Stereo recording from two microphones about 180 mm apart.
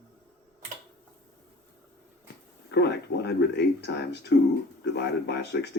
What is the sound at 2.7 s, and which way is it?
Speech, 70° left (ahead or behind).